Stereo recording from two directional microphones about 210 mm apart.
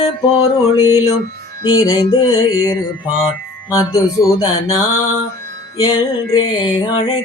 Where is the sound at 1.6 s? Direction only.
20° left (ahead or behind).